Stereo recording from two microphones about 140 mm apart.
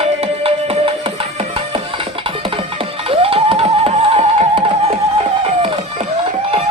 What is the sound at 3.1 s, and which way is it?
Music, 40° right (ahead or behind).